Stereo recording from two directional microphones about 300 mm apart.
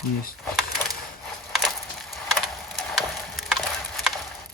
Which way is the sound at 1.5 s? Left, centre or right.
Centre.